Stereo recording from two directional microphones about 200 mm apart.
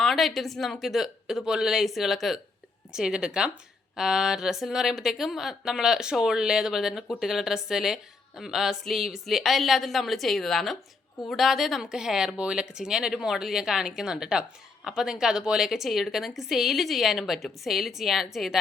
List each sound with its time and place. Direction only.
0.0 s a woman's voice: centre (ahead or behind)